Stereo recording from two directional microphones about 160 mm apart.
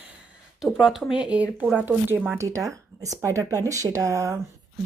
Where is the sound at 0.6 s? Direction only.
Centre (ahead or behind).